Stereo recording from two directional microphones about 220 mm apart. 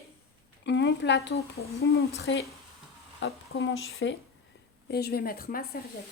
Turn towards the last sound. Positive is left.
turn(degrees=45)  # may be behind; listen again after turning